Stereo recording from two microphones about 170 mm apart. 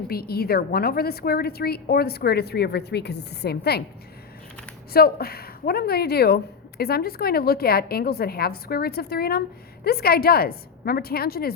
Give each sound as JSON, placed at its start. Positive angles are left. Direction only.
{"t": 0.1, "sound": "a woman's voice", "side_deg": 65}
{"t": 4.9, "sound": "a woman's voice", "side_deg": 65}